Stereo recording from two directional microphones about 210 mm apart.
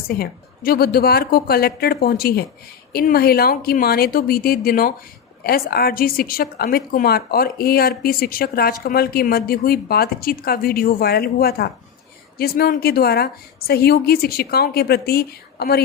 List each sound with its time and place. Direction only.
0.1 s a woman's voice: 45° left (ahead or behind)